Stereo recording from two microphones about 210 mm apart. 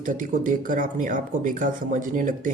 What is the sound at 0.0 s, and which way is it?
A man's voice, 40° right (ahead or behind).